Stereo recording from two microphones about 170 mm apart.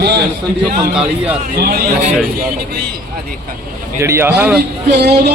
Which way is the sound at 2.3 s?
65° right (ahead or behind).